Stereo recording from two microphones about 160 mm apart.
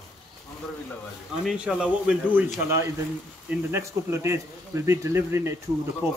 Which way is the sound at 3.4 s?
15° right (ahead or behind).